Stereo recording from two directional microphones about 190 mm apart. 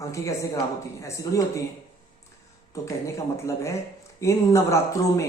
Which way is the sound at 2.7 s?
15° left (ahead or behind).